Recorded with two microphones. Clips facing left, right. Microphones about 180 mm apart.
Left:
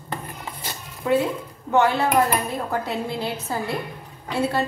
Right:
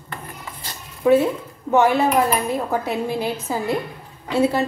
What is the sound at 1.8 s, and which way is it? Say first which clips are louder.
A woman's voice: right 3 dB; 20° right (ahead or behind).